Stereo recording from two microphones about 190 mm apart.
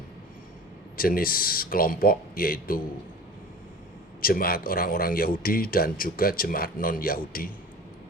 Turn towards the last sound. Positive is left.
turn(degrees=50)  # may be behind; listen again after turning